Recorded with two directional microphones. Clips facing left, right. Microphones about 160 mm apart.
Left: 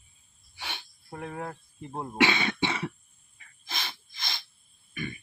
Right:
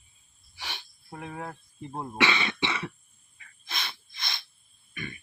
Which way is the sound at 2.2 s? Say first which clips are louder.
Left 2 dB; 50° left (ahead or behind).